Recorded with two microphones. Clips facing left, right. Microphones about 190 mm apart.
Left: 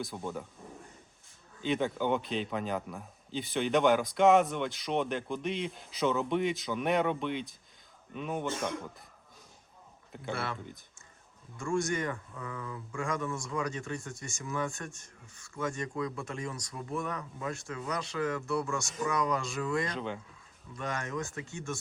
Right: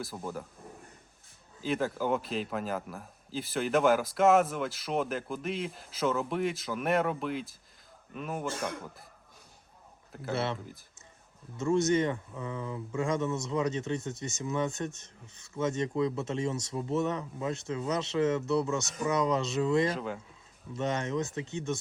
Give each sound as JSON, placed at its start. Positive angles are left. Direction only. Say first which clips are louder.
{"t": 0.0, "sound": "speech", "louder": "even", "side_deg": 0}
{"t": 1.6, "sound": "speech", "louder": "even", "side_deg": 0}
{"t": 10.1, "sound": "a man's voice", "louder": "right 1 dB", "side_deg": 0}
{"t": 10.3, "sound": "speech", "louder": "right 6 dB", "side_deg": -25}
{"t": 19.9, "sound": "speech", "louder": "right 2 dB", "side_deg": -5}
{"t": 20.7, "sound": "speech", "louder": "right 5 dB", "side_deg": -25}